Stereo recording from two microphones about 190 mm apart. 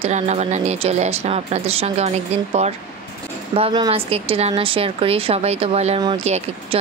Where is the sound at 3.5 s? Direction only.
25° right (ahead or behind).